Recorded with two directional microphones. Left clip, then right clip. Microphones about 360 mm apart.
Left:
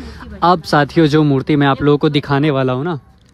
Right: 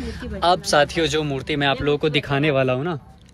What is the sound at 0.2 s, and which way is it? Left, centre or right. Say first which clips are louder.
A man's voice: left 6 dB; left.